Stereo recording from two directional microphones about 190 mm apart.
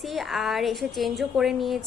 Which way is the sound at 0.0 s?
Centre (ahead or behind).